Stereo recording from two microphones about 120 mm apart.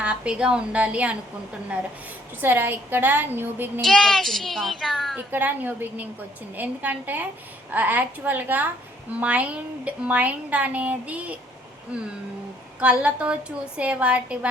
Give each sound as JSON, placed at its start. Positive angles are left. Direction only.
{"t": 0.0, "sound": "speech", "side_deg": -10}
{"t": 2.4, "sound": "speech", "side_deg": -15}
{"t": 3.8, "sound": "a child's voice", "side_deg": 5}
{"t": 5.1, "sound": "speech", "side_deg": -15}
{"t": 12.8, "sound": "speech", "side_deg": -10}